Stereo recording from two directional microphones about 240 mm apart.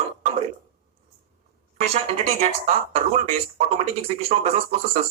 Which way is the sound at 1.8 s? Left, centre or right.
Right.